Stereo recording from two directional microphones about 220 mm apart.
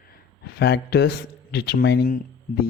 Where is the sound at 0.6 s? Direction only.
50° left (ahead or behind).